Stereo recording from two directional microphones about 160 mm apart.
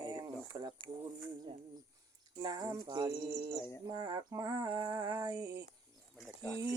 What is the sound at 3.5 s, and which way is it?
Bird, 10° left (ahead or behind).